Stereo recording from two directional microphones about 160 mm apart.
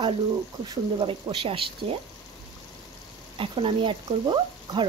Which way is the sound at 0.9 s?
35° right (ahead or behind).